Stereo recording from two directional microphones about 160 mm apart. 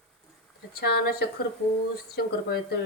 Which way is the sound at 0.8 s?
80° left.